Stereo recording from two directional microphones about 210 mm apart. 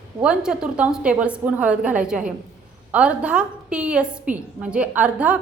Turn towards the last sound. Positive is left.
turn(degrees=-5)  # may be behind; listen again after turning